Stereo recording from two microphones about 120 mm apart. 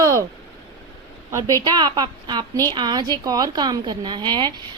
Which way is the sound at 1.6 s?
35° right (ahead or behind).